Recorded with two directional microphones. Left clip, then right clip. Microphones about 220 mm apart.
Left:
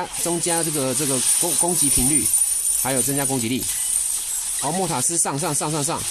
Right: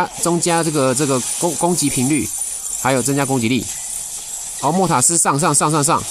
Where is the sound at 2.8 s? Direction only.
35° right (ahead or behind).